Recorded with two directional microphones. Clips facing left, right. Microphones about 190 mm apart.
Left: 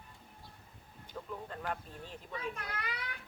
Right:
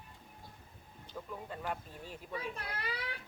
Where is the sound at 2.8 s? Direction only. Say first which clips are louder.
Right 2 dB; 30° right (ahead or behind).